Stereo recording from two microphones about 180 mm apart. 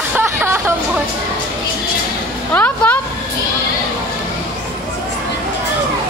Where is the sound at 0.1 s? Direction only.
10° right (ahead or behind).